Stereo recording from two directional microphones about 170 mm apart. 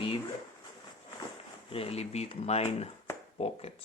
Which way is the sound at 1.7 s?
35° left (ahead or behind).